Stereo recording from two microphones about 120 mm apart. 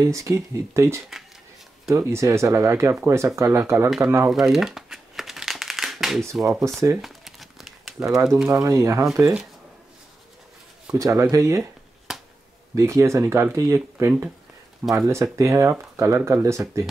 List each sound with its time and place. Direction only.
0.0 s speech: 25° right (ahead or behind)
4.3 s crumpling: centre (ahead or behind)
6.5 s speech: 25° right (ahead or behind)
7.0 s crumpling: centre (ahead or behind)
8.5 s speech: 25° right (ahead or behind)
11.0 s speech: 25° right (ahead or behind)
12.1 s finger snapping: 5° right (ahead or behind)
12.7 s speech: 25° right (ahead or behind)